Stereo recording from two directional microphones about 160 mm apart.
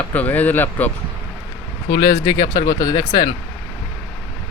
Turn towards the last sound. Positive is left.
turn(degrees=20)  # may be behind; listen again after turning